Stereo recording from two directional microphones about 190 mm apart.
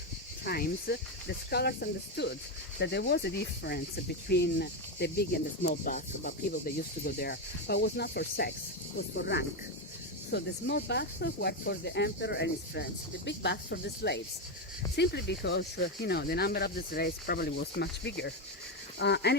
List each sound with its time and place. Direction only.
0.4 s speech: 55° left (ahead or behind)